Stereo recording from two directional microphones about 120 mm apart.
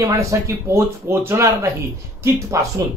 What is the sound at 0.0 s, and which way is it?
Speech, 25° right (ahead or behind).